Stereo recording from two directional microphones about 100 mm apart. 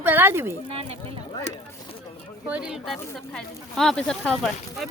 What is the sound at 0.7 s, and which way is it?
Speech, 75° right (ahead or behind).